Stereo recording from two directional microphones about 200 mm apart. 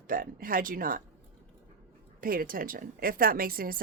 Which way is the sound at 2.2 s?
45° right (ahead or behind).